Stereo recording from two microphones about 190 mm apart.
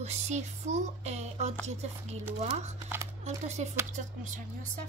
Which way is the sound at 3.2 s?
35° right (ahead or behind).